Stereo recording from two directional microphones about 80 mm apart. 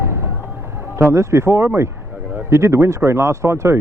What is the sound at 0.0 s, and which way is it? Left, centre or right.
Music, right.